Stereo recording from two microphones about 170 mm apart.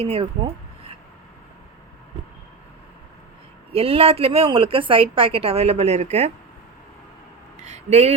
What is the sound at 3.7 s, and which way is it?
Speech, 35° right (ahead or behind).